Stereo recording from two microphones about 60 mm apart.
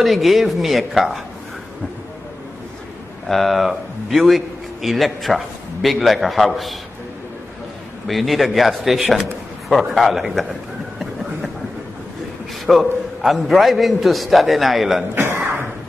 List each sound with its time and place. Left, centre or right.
0.0 s a man's voice: centre
3.3 s a man's voice: centre
8.1 s a man's voice: centre
12.6 s a man's voice: centre
15.1 s throat clearing: right